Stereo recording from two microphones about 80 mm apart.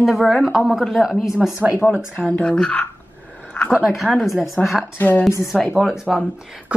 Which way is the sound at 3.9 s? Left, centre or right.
Centre.